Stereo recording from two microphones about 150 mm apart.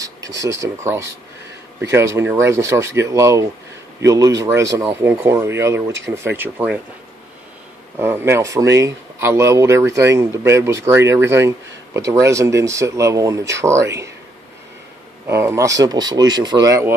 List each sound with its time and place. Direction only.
0.0 s speech: 20° right (ahead or behind)
8.0 s speech: 15° right (ahead or behind)
15.2 s speech: 15° right (ahead or behind)